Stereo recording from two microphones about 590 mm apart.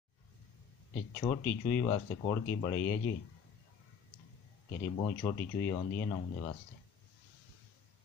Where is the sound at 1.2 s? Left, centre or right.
Centre.